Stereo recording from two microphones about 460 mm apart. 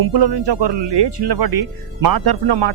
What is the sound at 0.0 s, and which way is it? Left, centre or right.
Speech, right.